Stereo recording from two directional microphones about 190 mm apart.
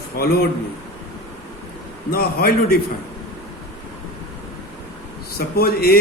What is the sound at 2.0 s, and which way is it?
Speech, 50° left (ahead or behind).